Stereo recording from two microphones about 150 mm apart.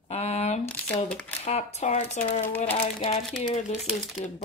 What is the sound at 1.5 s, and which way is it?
Speech, 45° left (ahead or behind).